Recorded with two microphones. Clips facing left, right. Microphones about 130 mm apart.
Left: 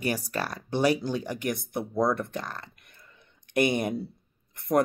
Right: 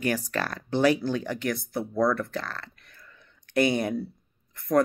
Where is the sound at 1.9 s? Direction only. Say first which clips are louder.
Right 1 dB; 20° left (ahead or behind).